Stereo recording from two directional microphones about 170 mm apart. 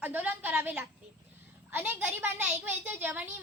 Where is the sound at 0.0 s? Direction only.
10° right (ahead or behind).